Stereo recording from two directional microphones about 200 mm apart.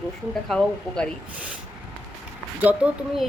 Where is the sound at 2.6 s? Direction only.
5° right (ahead or behind).